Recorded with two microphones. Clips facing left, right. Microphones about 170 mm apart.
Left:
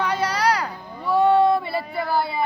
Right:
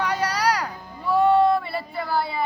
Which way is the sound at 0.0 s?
10° right (ahead or behind).